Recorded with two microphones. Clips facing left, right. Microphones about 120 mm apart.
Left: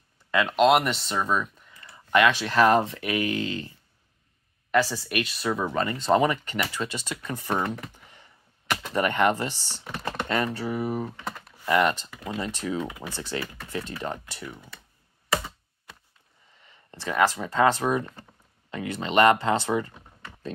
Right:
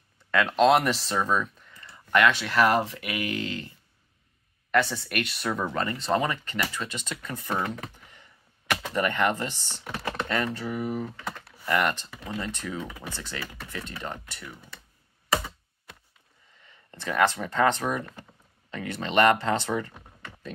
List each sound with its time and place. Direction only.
0.3 s speech: 5° left (ahead or behind)
1.7 s speech: 15° left (ahead or behind)
4.8 s speech: 10° left (ahead or behind)
5.7 s speech: 20° left (ahead or behind)
7.6 s computer keyboard: 20° left (ahead or behind)
8.9 s speech: 20° left (ahead or behind)
10.6 s speech: 35° left (ahead or behind)
11.6 s speech: 20° left (ahead or behind)
17.3 s speech: 5° left (ahead or behind); by 19.9 s 20° left (ahead or behind)